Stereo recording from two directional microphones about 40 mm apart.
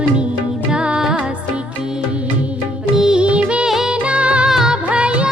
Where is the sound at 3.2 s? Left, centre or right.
Right.